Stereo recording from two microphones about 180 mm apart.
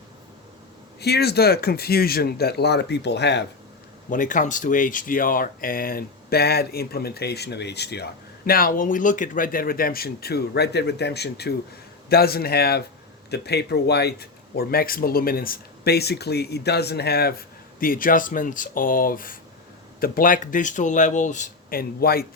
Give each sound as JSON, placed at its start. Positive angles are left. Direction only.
{"t": 1.0, "sound": "speech", "side_deg": 65}
{"t": 4.1, "sound": "speech", "side_deg": 45}